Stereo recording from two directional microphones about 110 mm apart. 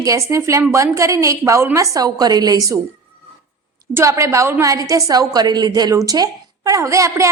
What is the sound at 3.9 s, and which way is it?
A woman's voice, 25° right (ahead or behind).